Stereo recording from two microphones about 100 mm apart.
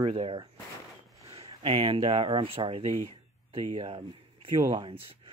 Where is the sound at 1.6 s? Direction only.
60° right (ahead or behind).